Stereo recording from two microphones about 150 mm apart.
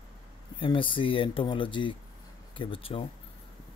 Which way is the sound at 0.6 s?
35° left (ahead or behind).